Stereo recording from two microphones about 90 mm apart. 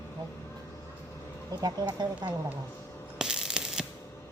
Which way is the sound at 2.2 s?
55° right (ahead or behind).